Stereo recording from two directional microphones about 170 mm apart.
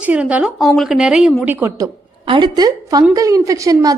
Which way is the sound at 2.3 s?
25° right (ahead or behind).